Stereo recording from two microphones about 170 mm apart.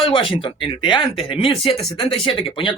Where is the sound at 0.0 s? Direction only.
30° left (ahead or behind).